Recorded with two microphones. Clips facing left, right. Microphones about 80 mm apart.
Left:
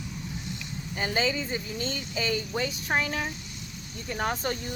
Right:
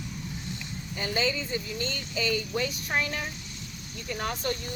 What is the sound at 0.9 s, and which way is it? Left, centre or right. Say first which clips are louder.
Speech: left 1 dB; left.